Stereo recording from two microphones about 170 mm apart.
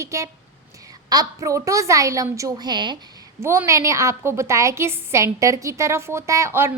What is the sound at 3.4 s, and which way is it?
A woman's voice, 15° right (ahead or behind).